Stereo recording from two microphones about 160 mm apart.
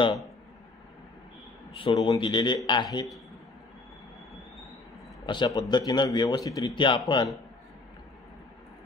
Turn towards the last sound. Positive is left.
turn(degrees=30)  # may be behind; listen again after turning